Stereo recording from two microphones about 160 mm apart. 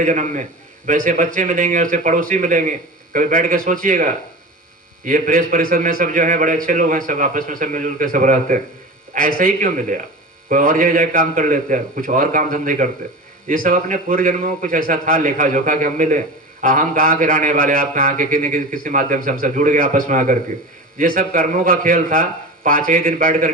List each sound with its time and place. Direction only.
0.0 s a man's voice: 50° right (ahead or behind)